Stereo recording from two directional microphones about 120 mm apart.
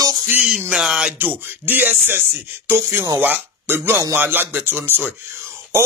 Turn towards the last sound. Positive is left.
turn(degrees=-20)  # may be behind; listen again after turning